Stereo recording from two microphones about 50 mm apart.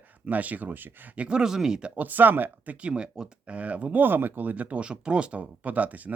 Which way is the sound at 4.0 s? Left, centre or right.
Right.